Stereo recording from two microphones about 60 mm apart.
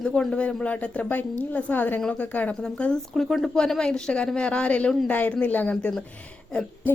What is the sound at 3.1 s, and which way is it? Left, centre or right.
A woman's voice, centre.